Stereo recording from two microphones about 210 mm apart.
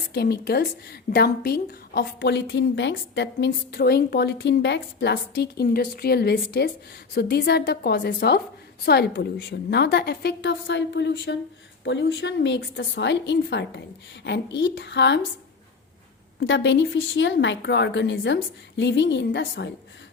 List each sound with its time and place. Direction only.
0.1 s a woman's voice: 50° left (ahead or behind)
16.4 s a woman's voice: 60° left (ahead or behind)